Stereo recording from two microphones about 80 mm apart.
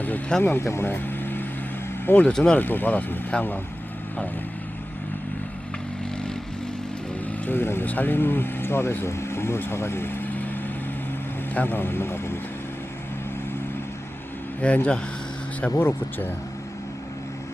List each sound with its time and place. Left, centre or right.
0.0 s speech: left
0.4 s speech: left; by 2.6 s centre
2.6 s speech: left
7.3 s speech: left
14.6 s speech: centre
15.8 s speech: left